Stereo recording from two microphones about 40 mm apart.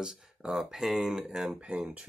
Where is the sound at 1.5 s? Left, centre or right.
Right.